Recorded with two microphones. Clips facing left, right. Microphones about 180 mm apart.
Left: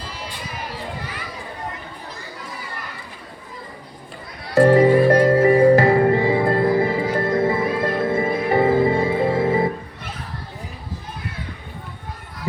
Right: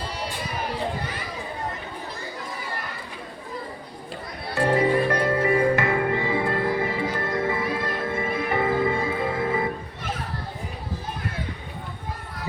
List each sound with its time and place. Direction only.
4.5 s music: 40° left (ahead or behind)